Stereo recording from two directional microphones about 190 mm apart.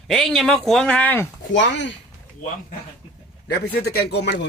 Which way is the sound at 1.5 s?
70° left (ahead or behind).